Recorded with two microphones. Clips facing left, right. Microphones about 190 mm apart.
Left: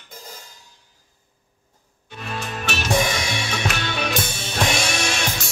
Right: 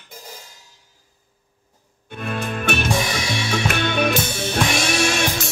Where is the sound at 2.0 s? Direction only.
55° right (ahead or behind).